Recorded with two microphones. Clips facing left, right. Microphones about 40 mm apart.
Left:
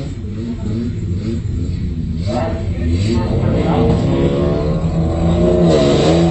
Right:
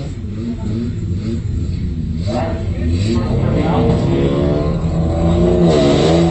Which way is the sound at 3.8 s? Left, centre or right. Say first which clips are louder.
Even; centre.